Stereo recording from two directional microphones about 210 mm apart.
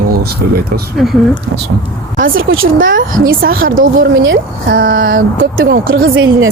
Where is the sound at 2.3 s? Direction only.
70° right (ahead or behind).